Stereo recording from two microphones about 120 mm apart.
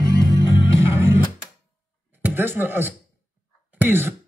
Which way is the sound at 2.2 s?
15° right (ahead or behind).